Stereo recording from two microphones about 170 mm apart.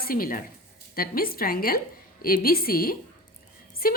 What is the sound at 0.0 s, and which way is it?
A woman's voice, 60° left (ahead or behind).